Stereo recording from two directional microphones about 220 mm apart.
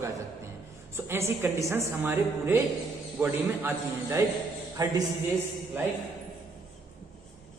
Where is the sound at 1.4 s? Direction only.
10° right (ahead or behind).